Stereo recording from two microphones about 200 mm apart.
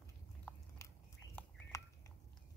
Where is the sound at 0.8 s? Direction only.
15° left (ahead or behind).